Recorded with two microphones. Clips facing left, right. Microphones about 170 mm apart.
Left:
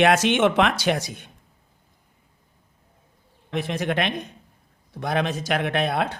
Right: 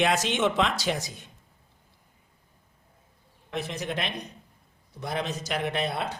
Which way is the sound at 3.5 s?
60° left (ahead or behind).